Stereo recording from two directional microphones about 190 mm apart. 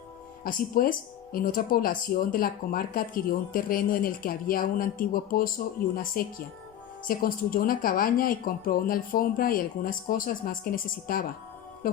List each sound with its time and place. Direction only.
0.4 s speech: 50° left (ahead or behind)